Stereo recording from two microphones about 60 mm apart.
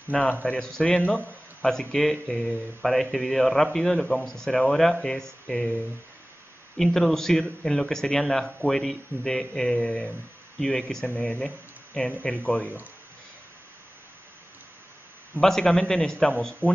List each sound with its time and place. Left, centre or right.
0.1 s speech: centre
0.6 s speech: centre
1.0 s speech: left
1.7 s speech: centre
2.2 s speech: left
2.8 s speech: centre
6.8 s speech: centre; by 10.1 s left
10.6 s speech: centre
15.4 s speech: centre